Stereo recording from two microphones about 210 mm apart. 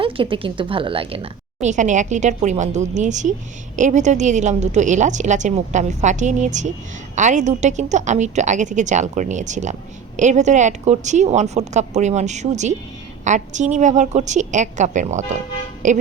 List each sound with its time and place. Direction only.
0.0 s a woman's voice: 25° right (ahead or behind)